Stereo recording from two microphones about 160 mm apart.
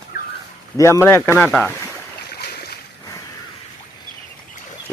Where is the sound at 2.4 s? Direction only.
80° left.